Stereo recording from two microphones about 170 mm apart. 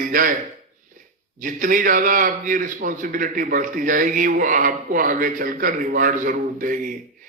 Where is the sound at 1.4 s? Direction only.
55° right (ahead or behind).